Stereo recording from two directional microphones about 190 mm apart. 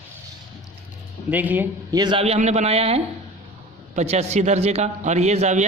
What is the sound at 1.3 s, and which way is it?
Speech, 10° right (ahead or behind).